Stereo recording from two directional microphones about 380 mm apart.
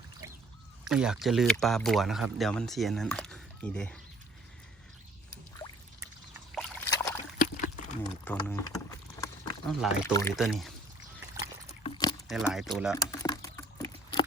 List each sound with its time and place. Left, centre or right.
0.9 s speech: centre
6.5 s boat: centre
7.3 s a sound: left
8.0 s speech: centre
11.8 s a sound: centre
12.3 s speech: centre
13.0 s typing: centre